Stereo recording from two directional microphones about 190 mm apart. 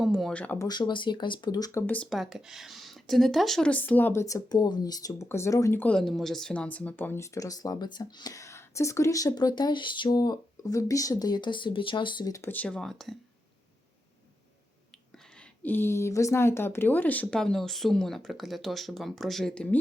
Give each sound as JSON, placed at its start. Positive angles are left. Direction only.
{"t": 0.0, "sound": "speech", "side_deg": 0}
{"t": 0.7, "sound": "speech", "side_deg": 25}
{"t": 1.9, "sound": "speech", "side_deg": 5}
{"t": 15.1, "sound": "speech", "side_deg": 10}